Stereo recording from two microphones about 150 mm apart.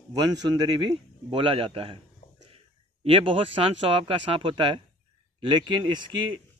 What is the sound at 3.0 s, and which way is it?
A man's voice, 35° right (ahead or behind).